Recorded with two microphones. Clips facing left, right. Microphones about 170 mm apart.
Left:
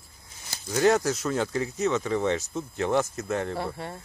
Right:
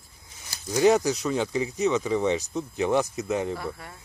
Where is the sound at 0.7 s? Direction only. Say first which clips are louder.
Right 2 dB; centre (ahead or behind).